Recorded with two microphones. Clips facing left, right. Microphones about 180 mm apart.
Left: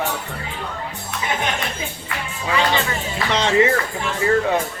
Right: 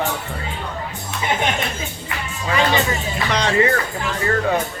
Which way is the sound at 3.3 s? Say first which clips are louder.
Left 1 dB; 25° left (ahead or behind).